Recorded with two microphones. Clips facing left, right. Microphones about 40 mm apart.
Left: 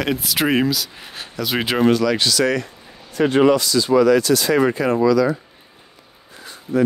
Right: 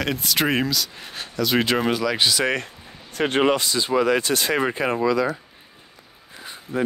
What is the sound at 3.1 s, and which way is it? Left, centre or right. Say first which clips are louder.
Speech: left 5 dB; right.